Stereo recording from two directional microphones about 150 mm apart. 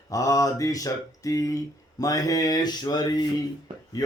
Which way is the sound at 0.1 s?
20° left (ahead or behind).